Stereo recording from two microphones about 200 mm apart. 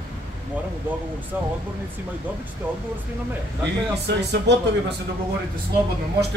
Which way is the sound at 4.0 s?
55° right (ahead or behind).